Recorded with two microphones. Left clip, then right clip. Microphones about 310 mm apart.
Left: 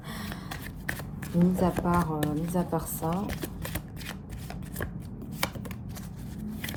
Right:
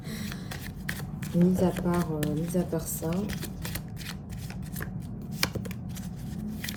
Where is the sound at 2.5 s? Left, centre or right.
Centre.